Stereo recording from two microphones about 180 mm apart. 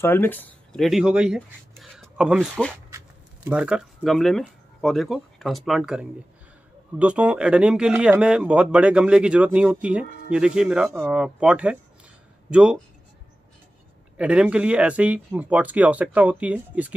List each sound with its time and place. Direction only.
0.0 s speech: 10° left (ahead or behind)
3.4 s speech: 5° right (ahead or behind)
14.1 s speech: 5° right (ahead or behind)